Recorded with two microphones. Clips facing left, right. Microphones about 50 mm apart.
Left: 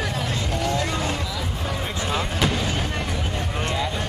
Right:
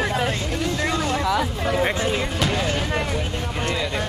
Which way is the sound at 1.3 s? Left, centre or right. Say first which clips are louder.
Right 7 dB; right.